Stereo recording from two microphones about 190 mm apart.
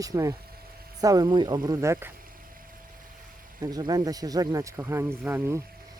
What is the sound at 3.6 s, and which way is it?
Speech, 20° right (ahead or behind).